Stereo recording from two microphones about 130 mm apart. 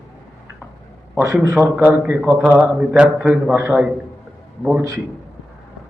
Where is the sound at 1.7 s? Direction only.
10° right (ahead or behind).